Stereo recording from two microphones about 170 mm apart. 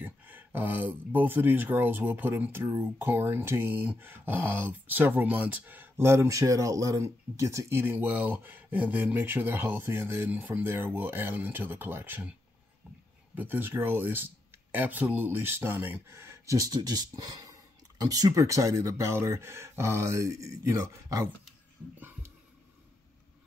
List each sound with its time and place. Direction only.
0.0 s speech: 10° right (ahead or behind)